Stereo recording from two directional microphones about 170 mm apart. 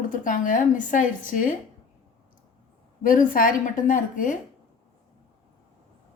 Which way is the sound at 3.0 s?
55° left (ahead or behind).